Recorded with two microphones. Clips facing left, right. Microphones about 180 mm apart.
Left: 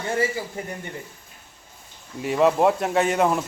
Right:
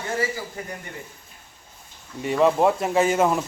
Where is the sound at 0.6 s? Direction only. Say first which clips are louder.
Left 2 dB; 25° left (ahead or behind).